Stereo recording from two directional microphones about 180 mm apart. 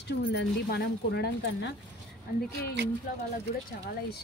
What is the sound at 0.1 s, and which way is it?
Speech, 65° left (ahead or behind).